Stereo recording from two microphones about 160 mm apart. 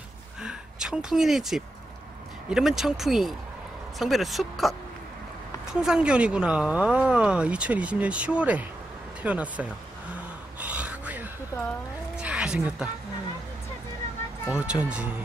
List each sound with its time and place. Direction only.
0.4 s a sound: 5° right (ahead or behind)
2.5 s speech: centre (ahead or behind)
10.6 s gasp: 10° right (ahead or behind)
11.5 s speech: 20° left (ahead or behind)
12.2 s a sound: 5° right (ahead or behind)
14.5 s speech: 5° right (ahead or behind)